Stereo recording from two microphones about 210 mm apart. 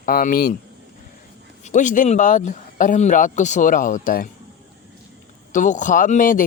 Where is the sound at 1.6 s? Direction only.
35° left (ahead or behind).